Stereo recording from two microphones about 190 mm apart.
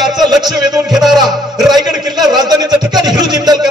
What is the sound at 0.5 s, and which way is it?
Speech, 20° right (ahead or behind).